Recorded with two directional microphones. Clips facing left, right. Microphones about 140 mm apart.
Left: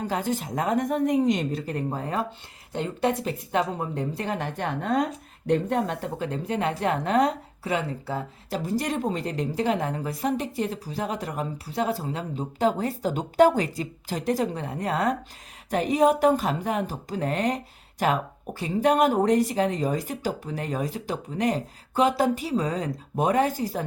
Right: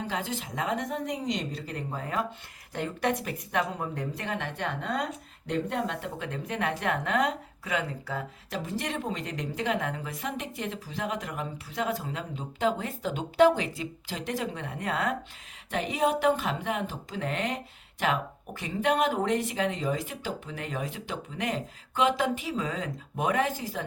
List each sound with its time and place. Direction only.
0.0 s a woman's voice: 45° left (ahead or behind)